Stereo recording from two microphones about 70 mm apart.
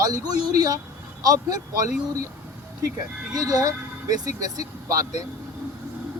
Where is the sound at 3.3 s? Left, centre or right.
Right.